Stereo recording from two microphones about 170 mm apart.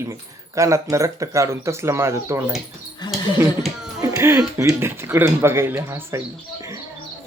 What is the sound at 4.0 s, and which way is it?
A man's voice, 15° right (ahead or behind).